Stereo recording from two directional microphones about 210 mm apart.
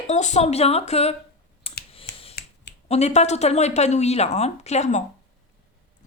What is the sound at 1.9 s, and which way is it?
Finger snapping, 25° left (ahead or behind).